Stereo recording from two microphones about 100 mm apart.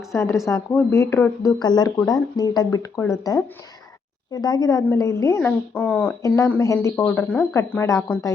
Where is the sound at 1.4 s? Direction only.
40° left (ahead or behind).